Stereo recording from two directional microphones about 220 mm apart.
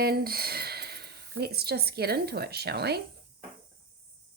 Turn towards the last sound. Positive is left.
turn(degrees=-45)  # may be behind; listen again after turning